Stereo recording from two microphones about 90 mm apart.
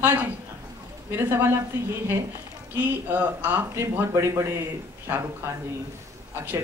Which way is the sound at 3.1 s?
20° right (ahead or behind).